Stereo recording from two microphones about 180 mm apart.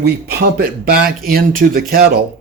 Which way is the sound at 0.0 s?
60° right (ahead or behind).